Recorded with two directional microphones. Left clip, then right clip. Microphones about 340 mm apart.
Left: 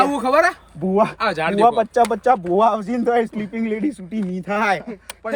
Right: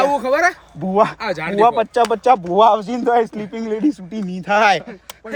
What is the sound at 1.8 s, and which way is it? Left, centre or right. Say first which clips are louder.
Speech: right 1 dB; right.